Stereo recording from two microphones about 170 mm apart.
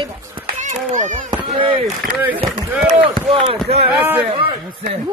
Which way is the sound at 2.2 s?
10° right (ahead or behind).